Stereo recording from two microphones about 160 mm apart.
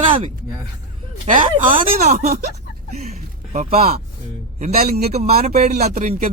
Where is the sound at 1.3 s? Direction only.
55° right (ahead or behind).